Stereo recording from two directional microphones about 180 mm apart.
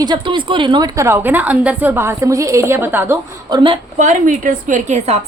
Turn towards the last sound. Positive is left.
turn(degrees=-40)  # may be behind; listen again after turning